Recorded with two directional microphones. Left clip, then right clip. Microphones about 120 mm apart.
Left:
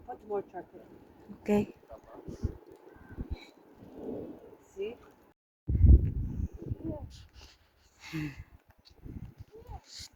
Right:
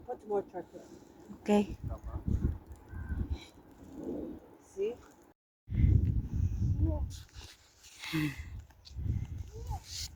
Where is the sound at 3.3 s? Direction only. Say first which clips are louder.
Even; 25° left (ahead or behind).